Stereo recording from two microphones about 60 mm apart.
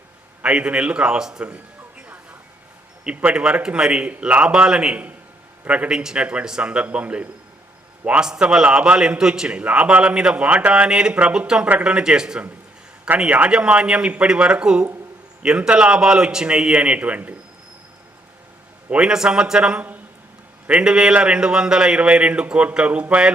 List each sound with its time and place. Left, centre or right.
0.4 s speech: centre
6.0 s speech: centre
18.9 s speech: centre